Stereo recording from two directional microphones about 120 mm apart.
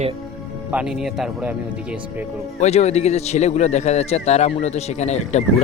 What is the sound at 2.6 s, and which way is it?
A man's voice, 65° left (ahead or behind).